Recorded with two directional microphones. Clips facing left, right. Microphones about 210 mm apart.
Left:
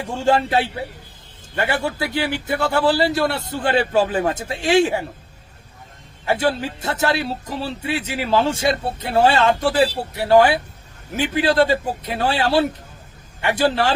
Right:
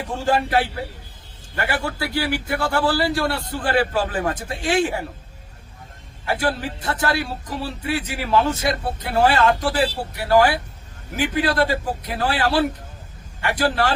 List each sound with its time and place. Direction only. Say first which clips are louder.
0.3 s speech: left 2 dB; 25° left (ahead or behind)
6.2 s speech: left 3 dB; 25° left (ahead or behind)